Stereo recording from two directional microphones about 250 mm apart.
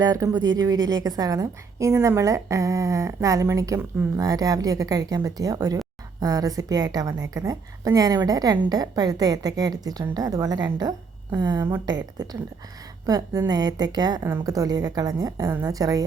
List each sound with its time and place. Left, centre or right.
0.0 s a woman's voice: centre